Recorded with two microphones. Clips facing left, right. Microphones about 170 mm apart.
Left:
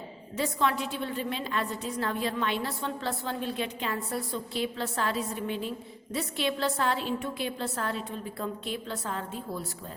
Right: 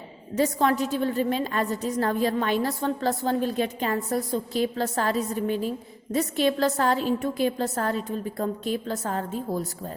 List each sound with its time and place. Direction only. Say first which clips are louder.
0.3 s a woman's voice: right 6 dB; 45° right (ahead or behind)